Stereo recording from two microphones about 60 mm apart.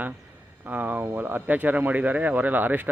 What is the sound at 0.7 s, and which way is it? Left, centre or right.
Speech, right.